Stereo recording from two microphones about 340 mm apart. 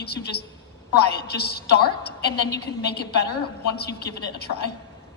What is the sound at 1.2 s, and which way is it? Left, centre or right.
A woman's voice, left.